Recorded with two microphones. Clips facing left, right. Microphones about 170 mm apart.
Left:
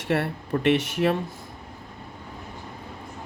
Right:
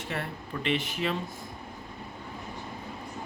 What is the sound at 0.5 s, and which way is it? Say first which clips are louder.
Speech: left 9 dB; 55° left (ahead or behind).